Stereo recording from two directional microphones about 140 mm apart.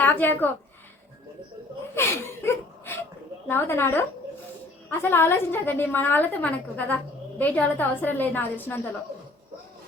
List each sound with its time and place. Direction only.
0.0 s a woman's voice: 15° left (ahead or behind)
2.0 s a woman's voice: 20° left (ahead or behind)